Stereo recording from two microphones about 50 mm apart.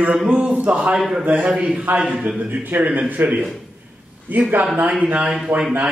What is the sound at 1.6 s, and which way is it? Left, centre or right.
Speech, right.